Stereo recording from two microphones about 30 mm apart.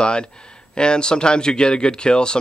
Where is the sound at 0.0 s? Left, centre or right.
Left.